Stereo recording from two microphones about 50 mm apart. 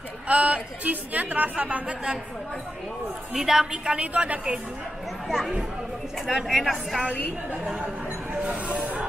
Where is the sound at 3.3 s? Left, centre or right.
Centre.